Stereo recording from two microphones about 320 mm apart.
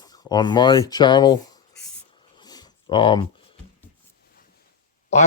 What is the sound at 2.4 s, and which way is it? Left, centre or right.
Dog, centre.